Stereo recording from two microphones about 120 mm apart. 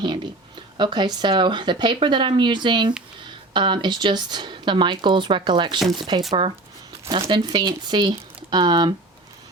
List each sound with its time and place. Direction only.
0.8 s speech: 40° right (ahead or behind)